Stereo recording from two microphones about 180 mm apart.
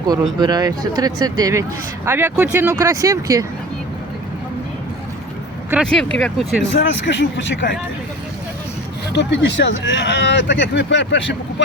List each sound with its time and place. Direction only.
0.1 s speech: 25° right (ahead or behind)
5.8 s speech: 5° left (ahead or behind)
6.6 s speech: 80° left
9.1 s speech: 75° left (ahead or behind)